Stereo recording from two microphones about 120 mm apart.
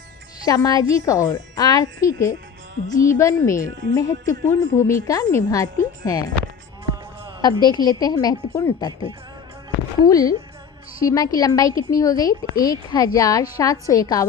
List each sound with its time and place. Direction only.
0.4 s a woman's voice: 30° left (ahead or behind)
7.4 s a woman's voice: 35° left (ahead or behind)
10.1 s a woman's voice: 30° left (ahead or behind)